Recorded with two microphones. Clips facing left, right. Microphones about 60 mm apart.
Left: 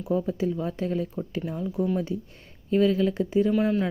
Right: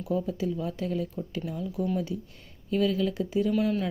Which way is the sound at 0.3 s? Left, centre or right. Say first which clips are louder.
Left 3 dB; left.